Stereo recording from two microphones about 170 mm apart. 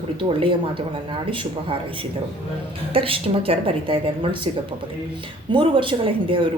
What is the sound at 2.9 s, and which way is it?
A woman's voice, 35° right (ahead or behind).